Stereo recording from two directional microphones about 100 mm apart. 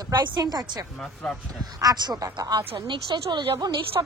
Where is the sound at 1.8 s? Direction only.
45° right (ahead or behind).